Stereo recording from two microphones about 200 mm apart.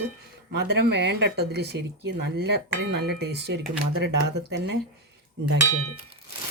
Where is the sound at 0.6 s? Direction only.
55° right (ahead or behind).